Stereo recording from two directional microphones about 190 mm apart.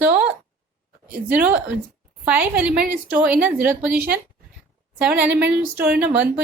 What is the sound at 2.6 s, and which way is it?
A woman's voice, 5° right (ahead or behind).